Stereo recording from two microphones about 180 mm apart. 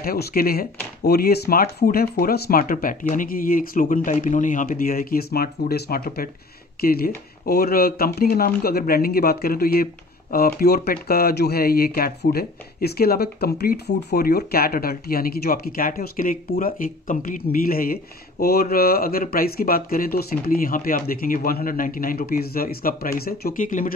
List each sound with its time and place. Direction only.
0.0 s speech: 55° left (ahead or behind)